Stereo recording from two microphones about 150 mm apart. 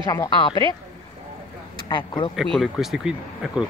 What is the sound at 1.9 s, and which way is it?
Speech, 30° left (ahead or behind).